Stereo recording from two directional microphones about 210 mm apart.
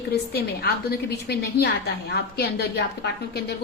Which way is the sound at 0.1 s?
50° left (ahead or behind).